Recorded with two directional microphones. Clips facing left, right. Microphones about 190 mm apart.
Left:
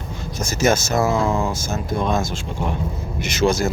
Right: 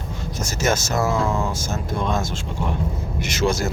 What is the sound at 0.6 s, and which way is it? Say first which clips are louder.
A man's voice: left 3 dB; 15° left (ahead or behind).